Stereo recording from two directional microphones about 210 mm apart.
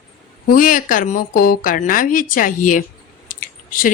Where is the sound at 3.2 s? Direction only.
40° left (ahead or behind).